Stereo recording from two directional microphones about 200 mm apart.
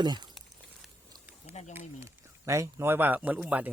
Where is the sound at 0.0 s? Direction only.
20° right (ahead or behind).